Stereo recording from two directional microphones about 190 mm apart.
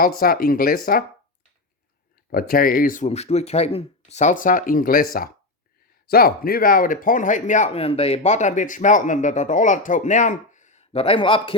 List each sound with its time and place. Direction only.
0.0 s speech: 50° left (ahead or behind)
2.3 s speech: 50° left (ahead or behind); by 11.5 s 25° left (ahead or behind)